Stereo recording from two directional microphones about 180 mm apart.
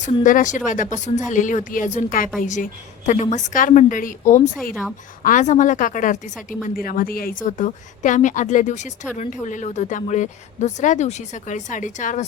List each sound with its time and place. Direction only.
0.0 s a woman's voice: 45° left (ahead or behind)
4.7 s a woman's voice: centre (ahead or behind)
5.2 s a woman's voice: 45° left (ahead or behind)